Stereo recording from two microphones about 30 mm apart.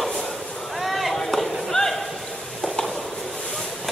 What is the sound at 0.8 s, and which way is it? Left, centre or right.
Chop, centre.